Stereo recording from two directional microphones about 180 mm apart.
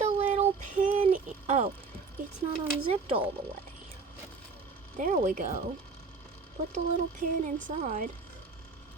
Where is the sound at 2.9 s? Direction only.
30° right (ahead or behind).